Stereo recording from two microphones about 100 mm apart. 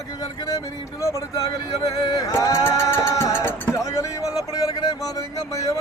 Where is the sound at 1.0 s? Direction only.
35° left (ahead or behind).